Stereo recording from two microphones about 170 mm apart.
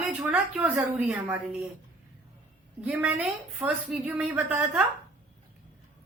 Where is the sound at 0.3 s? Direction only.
10° right (ahead or behind).